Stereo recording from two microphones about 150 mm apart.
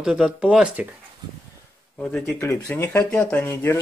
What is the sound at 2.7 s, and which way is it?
Speech, 15° left (ahead or behind).